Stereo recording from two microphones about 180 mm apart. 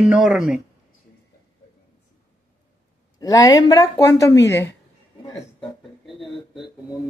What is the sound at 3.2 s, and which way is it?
Speech, 20° left (ahead or behind).